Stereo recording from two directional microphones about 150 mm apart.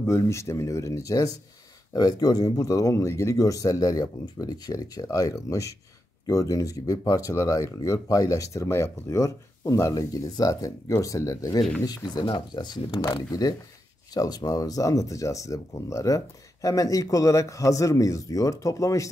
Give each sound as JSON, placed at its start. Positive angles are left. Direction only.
{"t": 0.0, "sound": "speech", "side_deg": 20}